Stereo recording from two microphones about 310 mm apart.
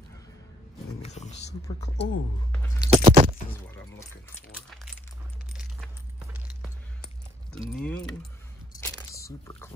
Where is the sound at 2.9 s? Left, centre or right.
Centre.